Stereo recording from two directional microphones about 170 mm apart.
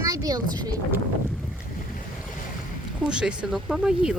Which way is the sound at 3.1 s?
5° right (ahead or behind).